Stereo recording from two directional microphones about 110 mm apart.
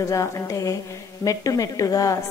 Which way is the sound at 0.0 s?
30° left (ahead or behind).